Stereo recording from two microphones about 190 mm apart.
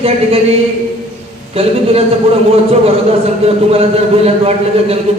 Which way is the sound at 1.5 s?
30° right (ahead or behind).